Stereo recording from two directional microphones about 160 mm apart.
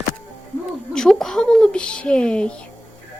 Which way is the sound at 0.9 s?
5° left (ahead or behind).